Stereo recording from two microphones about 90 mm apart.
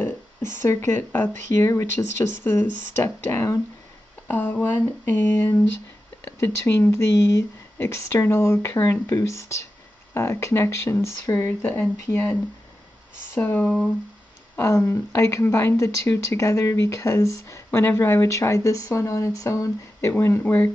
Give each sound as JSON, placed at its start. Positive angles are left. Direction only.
{"t": 0.0, "sound": "speech", "side_deg": 25}
{"t": 4.3, "sound": "speech", "side_deg": 20}